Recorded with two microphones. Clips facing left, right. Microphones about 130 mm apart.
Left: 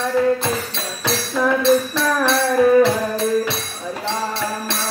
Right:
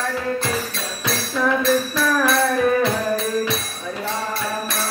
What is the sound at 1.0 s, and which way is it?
Music, 30° left (ahead or behind).